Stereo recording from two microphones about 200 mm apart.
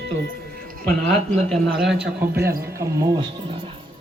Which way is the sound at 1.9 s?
55° right (ahead or behind).